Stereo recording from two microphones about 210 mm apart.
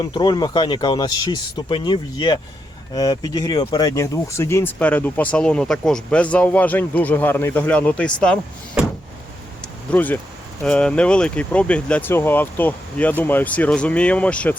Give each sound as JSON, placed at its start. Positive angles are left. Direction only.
{"t": 0.0, "sound": "speech", "side_deg": 20}
{"t": 9.9, "sound": "speech", "side_deg": 10}